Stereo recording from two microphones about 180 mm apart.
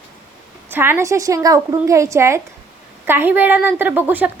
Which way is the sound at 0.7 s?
10° right (ahead or behind).